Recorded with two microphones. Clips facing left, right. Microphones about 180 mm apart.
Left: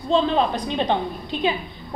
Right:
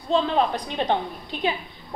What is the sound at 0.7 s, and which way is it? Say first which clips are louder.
Speech: left 2 dB; 20° left (ahead or behind).